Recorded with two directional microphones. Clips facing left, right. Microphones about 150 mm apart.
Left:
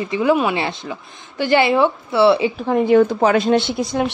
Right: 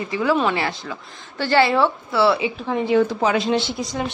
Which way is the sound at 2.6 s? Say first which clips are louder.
Left 5 dB; 50° left (ahead or behind).